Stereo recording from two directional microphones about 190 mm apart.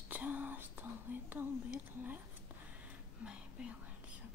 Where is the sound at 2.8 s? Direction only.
5° right (ahead or behind).